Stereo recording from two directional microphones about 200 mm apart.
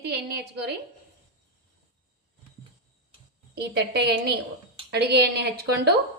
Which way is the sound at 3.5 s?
55° right (ahead or behind).